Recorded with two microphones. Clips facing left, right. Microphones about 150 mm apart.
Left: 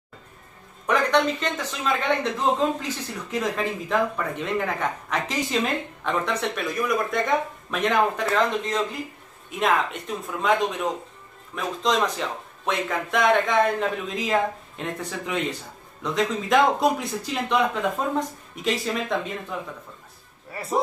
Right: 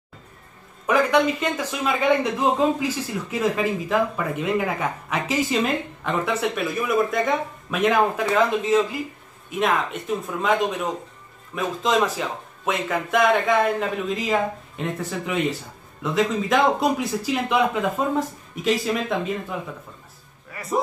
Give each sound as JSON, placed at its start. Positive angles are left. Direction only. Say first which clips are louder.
{"t": 0.8, "sound": "a man's voice", "louder": "right 2 dB", "side_deg": -10}
{"t": 20.5, "sound": "a man's voice", "louder": "left 2 dB", "side_deg": 30}